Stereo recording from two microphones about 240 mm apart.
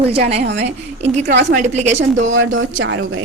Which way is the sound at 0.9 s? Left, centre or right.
Right.